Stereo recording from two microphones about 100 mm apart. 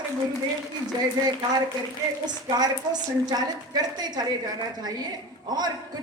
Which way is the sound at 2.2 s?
45° right (ahead or behind).